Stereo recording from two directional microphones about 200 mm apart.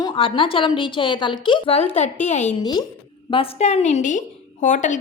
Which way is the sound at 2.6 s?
20° left (ahead or behind).